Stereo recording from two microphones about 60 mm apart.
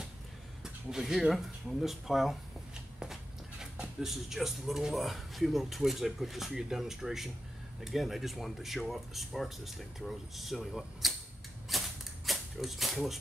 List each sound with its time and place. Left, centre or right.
0.8 s speech: centre
11.7 s mechanisms: centre